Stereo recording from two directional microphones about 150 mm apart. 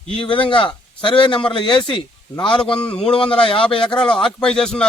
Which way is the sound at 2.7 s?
10° left (ahead or behind).